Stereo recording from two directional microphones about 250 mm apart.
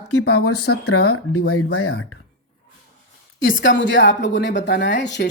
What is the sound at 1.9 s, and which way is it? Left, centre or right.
Speech, left.